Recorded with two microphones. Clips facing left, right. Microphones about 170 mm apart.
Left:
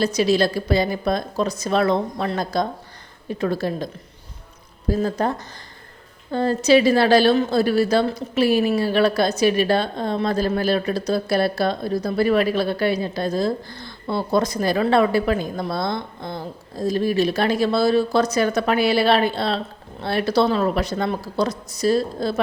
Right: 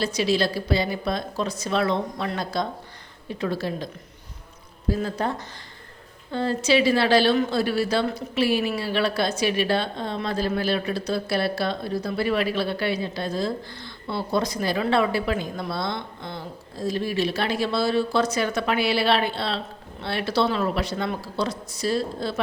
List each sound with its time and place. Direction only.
0.0 s speech: 45° left (ahead or behind)
5.0 s speech: 45° left (ahead or behind)
6.3 s speech: 45° left (ahead or behind)